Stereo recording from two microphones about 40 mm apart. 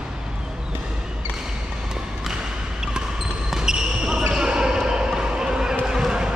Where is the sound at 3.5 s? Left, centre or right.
Centre.